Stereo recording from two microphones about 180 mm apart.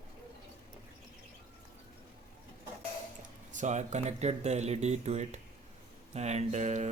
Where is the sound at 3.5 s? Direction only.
40° right (ahead or behind).